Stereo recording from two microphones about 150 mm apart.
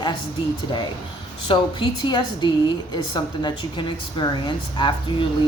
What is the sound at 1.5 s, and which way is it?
Speech, 30° left (ahead or behind).